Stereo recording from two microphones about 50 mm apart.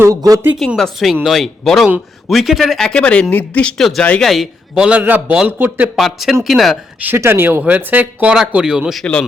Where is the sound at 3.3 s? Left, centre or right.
Left.